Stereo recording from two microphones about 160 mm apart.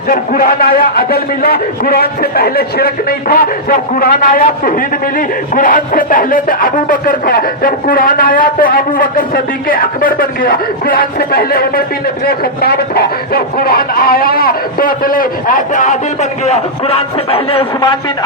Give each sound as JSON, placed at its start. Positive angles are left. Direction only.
{"t": 0.1, "sound": "a man's voice", "side_deg": 65}
{"t": 16.5, "sound": "a man's voice", "side_deg": 40}